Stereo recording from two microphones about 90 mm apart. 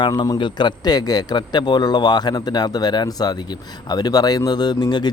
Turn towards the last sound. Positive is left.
turn(degrees=50)  # may be behind; listen again after turning